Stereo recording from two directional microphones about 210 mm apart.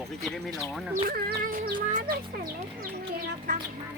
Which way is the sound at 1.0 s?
45° right (ahead or behind).